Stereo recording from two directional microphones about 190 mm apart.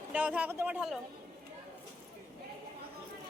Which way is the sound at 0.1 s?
5° right (ahead or behind).